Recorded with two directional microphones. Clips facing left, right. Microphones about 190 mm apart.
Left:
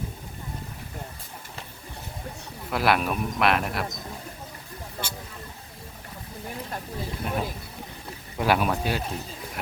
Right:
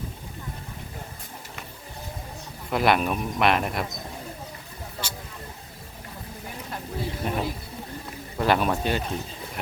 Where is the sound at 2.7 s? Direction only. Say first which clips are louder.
Right 2 dB; centre (ahead or behind).